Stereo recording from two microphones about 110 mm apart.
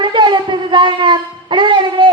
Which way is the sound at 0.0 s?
45° right (ahead or behind).